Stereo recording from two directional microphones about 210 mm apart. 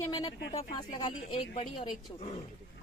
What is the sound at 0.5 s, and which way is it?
Speech, 35° left (ahead or behind).